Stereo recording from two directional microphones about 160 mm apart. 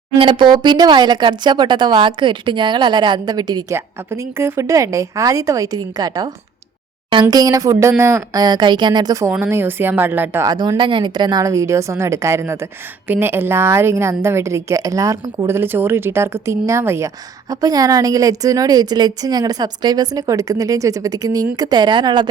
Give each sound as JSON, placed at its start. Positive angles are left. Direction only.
{"t": 0.2, "sound": "a woman's voice", "side_deg": -30}
{"t": 10.5, "sound": "a woman's voice", "side_deg": -25}